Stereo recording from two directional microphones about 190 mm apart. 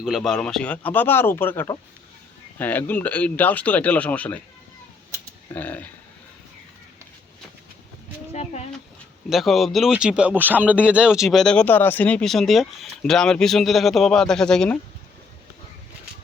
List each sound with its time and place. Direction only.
0.0 s speech: centre (ahead or behind)
5.5 s speech: 10° left (ahead or behind)
8.3 s a sound: 35° left (ahead or behind)
9.3 s speech: centre (ahead or behind)